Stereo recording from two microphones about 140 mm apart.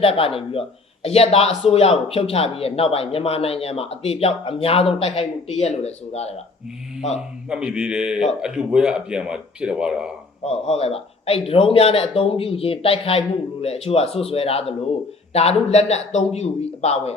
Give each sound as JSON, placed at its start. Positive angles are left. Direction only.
{"t": 0.0, "sound": "speech", "side_deg": 40}
{"t": 7.4, "sound": "a man's voice", "side_deg": -5}
{"t": 10.4, "sound": "speech", "side_deg": 45}